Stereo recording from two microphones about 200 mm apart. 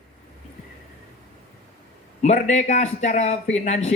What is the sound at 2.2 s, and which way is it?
Speech, 35° left (ahead or behind).